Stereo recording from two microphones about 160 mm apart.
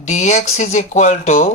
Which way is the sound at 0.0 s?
50° left (ahead or behind).